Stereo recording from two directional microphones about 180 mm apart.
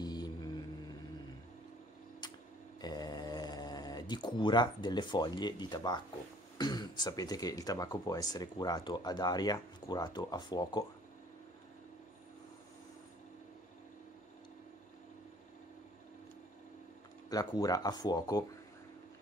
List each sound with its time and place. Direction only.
0.0 s a sound: 20° left (ahead or behind)
2.8 s speech: 20° left (ahead or behind)
17.3 s speech: 20° left (ahead or behind)